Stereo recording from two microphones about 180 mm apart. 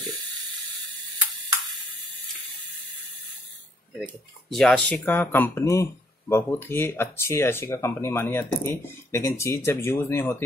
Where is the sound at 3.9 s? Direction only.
Centre (ahead or behind).